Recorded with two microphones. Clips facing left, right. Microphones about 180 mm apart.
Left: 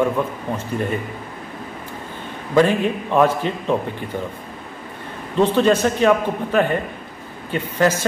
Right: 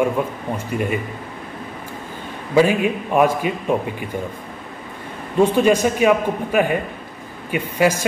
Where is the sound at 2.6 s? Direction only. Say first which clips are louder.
Even; 10° right (ahead or behind).